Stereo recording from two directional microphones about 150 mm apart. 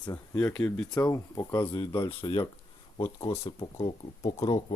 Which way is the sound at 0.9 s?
25° left (ahead or behind).